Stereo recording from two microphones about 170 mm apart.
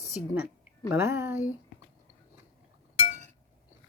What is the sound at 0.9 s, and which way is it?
Speech, 15° right (ahead or behind).